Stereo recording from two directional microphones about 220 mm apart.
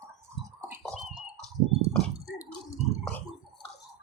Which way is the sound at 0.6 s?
Centre (ahead or behind).